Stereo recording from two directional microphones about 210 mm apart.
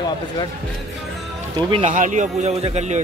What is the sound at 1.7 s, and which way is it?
A man's voice, 35° right (ahead or behind).